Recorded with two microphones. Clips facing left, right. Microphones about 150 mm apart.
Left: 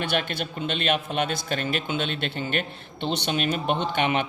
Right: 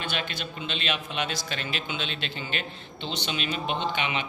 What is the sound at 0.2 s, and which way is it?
A man's voice, 50° left (ahead or behind).